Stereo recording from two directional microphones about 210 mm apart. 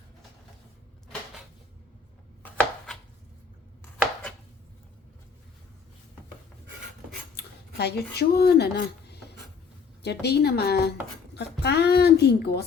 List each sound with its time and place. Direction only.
2.4 s chopping: centre (ahead or behind)
4.0 s chopping: 5° left (ahead or behind)
7.3 s a woman's voice: 50° left (ahead or behind)